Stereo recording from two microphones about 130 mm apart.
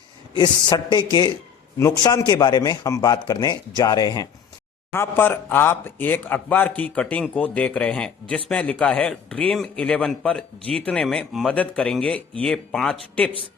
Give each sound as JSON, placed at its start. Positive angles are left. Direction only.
{"t": 0.3, "sound": "a man's voice", "side_deg": 35}
{"t": 4.9, "sound": "speech", "side_deg": 15}
{"t": 11.5, "sound": "speech", "side_deg": 10}